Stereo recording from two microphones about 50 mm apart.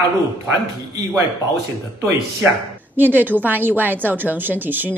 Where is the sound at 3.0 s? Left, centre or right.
Right.